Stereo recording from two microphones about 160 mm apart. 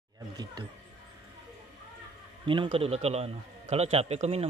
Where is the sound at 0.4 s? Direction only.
25° right (ahead or behind).